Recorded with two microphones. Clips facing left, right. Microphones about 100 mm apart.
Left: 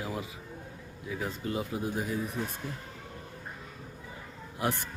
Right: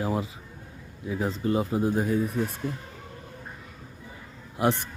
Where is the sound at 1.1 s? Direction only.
30° right (ahead or behind).